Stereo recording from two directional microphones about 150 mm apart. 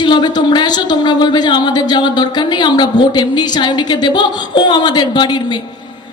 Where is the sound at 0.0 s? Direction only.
30° left (ahead or behind).